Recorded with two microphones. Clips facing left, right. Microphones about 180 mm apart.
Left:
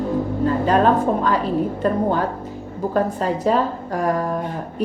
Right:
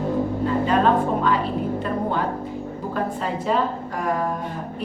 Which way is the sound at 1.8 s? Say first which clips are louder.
Left 4 dB; 40° left (ahead or behind).